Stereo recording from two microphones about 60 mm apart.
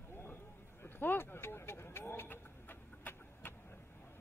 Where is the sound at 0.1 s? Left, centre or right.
Left.